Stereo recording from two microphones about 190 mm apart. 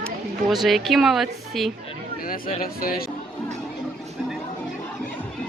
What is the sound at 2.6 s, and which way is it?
Speech, 50° left (ahead or behind).